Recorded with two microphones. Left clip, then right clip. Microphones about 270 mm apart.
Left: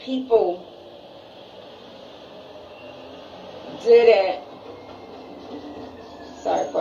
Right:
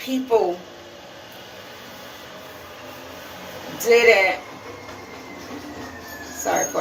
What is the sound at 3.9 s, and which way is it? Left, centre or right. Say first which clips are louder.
Speech: left 1 dB; right.